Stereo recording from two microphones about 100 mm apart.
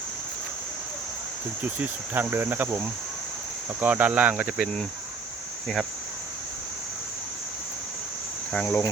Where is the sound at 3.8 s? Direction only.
15° right (ahead or behind).